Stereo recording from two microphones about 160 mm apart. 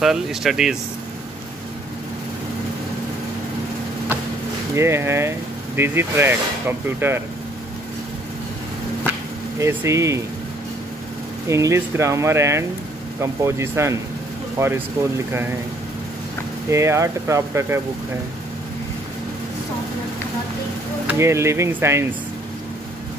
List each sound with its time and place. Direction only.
0.0 s speech: centre (ahead or behind)
4.7 s speech: 15° right (ahead or behind)
9.6 s speech: 20° right (ahead or behind)
11.4 s speech: 20° right (ahead or behind)
16.7 s speech: 20° right (ahead or behind)
21.1 s speech: 15° right (ahead or behind)